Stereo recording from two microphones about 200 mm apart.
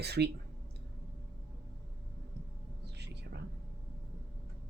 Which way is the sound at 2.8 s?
55° right (ahead or behind).